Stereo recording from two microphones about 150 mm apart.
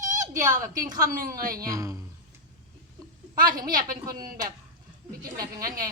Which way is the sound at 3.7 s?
65° right (ahead or behind).